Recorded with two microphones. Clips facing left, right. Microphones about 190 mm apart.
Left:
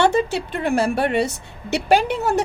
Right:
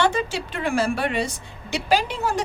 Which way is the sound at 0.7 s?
60° left (ahead or behind).